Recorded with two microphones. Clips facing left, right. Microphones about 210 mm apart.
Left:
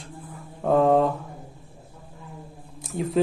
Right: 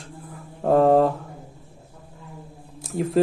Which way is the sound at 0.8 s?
40° right (ahead or behind).